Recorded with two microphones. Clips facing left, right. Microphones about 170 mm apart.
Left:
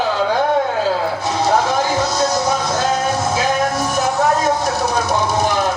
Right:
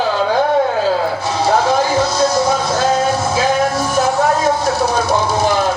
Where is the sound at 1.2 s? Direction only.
20° left (ahead or behind).